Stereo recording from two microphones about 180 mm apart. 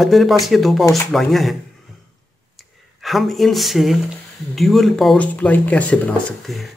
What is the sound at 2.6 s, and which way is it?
Speech, centre (ahead or behind).